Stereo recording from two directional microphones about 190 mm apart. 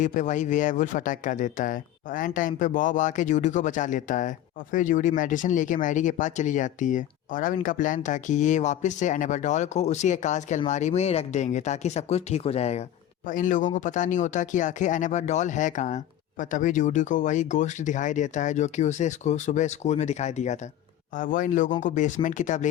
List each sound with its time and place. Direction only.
0.0 s speech: 40° left (ahead or behind)